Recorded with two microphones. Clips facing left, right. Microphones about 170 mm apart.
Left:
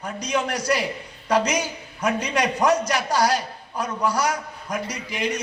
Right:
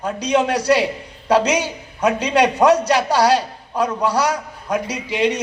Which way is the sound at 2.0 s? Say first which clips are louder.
Right 5 dB; 65° right (ahead or behind).